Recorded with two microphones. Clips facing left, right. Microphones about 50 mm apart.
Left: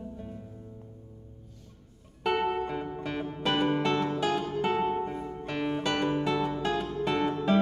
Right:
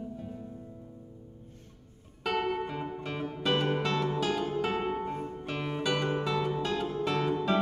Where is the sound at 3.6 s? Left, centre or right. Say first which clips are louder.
Left 3 dB; centre.